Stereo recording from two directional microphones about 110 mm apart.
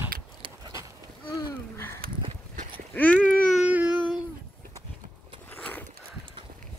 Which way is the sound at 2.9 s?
15° left (ahead or behind).